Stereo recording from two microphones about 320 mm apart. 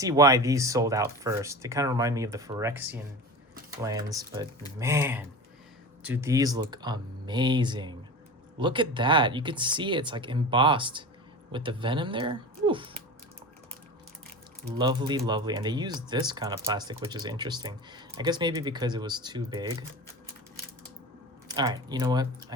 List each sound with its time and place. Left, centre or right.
0.0 s speech: centre
14.8 s speech: centre
21.4 s speech: centre